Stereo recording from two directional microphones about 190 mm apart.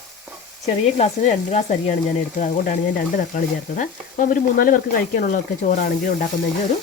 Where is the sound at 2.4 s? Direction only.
40° left (ahead or behind).